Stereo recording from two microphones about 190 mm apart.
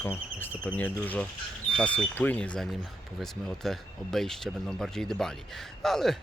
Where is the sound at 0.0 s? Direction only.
10° left (ahead or behind).